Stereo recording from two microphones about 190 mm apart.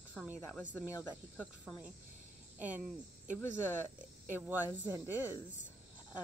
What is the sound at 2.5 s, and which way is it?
Speech, 10° right (ahead or behind).